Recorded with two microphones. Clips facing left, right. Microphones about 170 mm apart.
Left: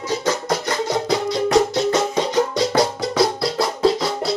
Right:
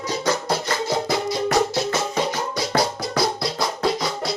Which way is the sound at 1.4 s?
20° left (ahead or behind).